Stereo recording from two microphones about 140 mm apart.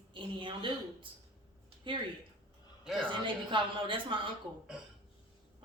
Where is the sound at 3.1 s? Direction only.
35° right (ahead or behind).